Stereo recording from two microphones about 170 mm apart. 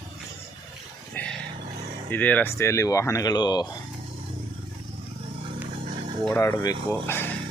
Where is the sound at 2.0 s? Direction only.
10° left (ahead or behind).